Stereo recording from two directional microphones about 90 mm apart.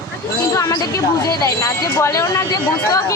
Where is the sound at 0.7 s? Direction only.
45° left (ahead or behind).